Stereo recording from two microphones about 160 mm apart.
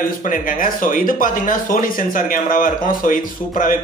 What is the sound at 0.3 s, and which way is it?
Speech, 60° left (ahead or behind).